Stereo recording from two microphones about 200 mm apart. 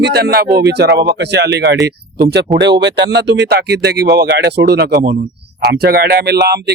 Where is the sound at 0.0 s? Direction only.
55° right (ahead or behind).